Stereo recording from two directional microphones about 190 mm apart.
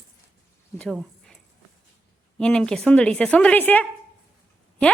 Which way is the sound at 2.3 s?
5° left (ahead or behind).